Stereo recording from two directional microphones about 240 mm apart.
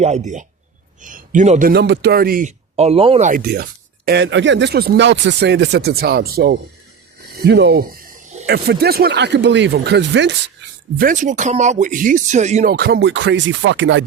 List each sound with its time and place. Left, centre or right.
0.0 s speech: right
10.9 s speech: right
12.7 s speech: right